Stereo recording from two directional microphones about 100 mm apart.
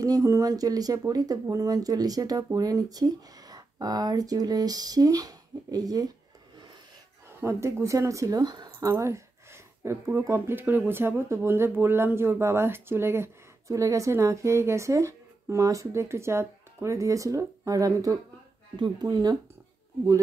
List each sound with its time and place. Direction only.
0.0 s speech: 35° right (ahead or behind)
7.3 s speech: 30° right (ahead or behind)